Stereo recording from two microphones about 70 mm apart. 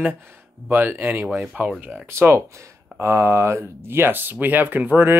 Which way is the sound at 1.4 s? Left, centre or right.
Centre.